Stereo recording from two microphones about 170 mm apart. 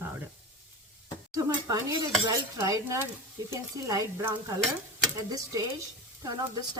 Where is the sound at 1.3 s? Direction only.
20° right (ahead or behind).